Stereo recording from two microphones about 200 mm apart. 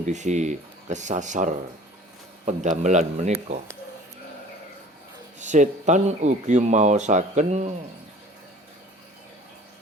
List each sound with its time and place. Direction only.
0.1 s speech: 35° right (ahead or behind)
5.4 s speech: 35° right (ahead or behind)